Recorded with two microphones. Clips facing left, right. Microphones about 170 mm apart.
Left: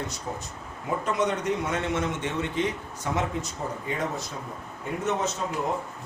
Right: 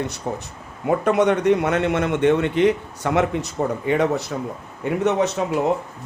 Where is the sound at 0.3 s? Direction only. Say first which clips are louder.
Right 6 dB; 65° right (ahead or behind).